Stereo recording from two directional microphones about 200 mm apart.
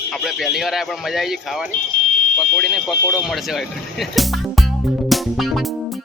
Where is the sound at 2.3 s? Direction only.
Centre (ahead or behind).